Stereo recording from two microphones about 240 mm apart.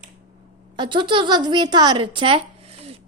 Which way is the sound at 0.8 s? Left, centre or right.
Centre.